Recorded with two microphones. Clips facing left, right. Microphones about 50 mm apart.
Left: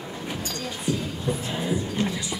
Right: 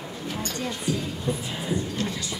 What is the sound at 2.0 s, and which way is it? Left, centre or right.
Music, left.